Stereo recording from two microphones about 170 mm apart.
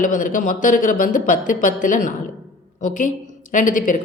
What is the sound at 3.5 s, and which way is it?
Speech, 50° left (ahead or behind).